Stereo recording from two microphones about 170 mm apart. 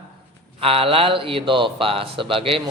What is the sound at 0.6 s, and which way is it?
A man's voice, 35° right (ahead or behind).